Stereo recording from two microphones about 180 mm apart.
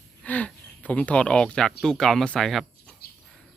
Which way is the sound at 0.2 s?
5° left (ahead or behind).